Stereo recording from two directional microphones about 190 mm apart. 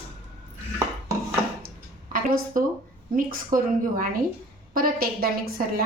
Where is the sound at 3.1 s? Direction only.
45° right (ahead or behind).